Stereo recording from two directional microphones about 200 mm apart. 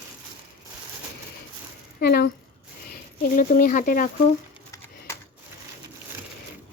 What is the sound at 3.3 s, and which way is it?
Speech, 40° left (ahead or behind).